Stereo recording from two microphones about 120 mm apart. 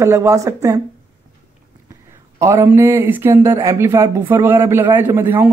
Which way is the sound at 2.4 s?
20° right (ahead or behind).